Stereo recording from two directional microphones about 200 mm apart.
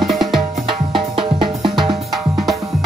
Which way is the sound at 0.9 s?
25° right (ahead or behind).